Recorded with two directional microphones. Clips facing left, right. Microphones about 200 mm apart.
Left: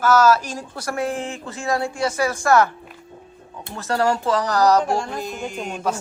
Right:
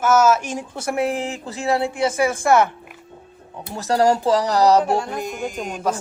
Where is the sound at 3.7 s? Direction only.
35° right (ahead or behind).